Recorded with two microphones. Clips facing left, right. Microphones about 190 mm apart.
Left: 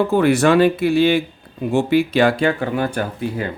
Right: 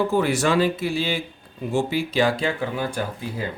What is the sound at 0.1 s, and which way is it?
Speech, 60° left (ahead or behind).